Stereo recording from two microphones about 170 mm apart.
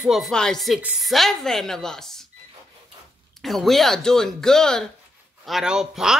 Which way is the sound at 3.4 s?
Centre (ahead or behind).